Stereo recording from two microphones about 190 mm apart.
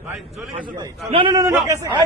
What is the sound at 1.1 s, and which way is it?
Speech, 25° right (ahead or behind).